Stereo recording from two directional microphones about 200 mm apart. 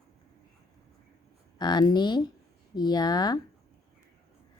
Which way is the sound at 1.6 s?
20° left (ahead or behind).